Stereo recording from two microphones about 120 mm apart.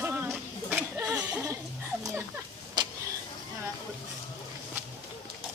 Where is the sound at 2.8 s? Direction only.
35° right (ahead or behind).